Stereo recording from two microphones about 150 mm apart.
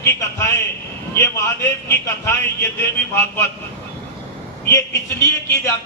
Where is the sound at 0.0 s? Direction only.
20° left (ahead or behind).